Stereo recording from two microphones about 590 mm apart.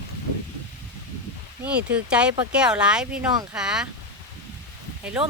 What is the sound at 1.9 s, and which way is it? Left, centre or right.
Speech, centre.